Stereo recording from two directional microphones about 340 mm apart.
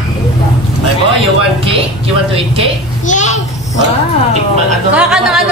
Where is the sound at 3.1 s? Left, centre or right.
Left.